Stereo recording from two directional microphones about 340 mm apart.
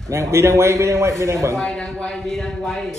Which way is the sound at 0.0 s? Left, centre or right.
Centre.